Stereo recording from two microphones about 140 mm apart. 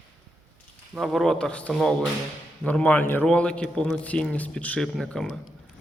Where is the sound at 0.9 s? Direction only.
Centre (ahead or behind).